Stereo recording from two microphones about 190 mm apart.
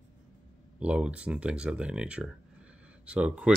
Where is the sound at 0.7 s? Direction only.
5° right (ahead or behind).